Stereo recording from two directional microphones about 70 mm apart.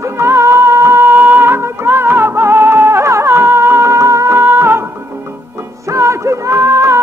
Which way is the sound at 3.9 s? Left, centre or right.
Right.